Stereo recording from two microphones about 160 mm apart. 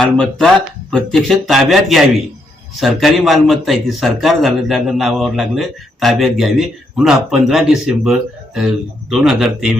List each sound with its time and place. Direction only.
0.0 s a man's voice: centre (ahead or behind)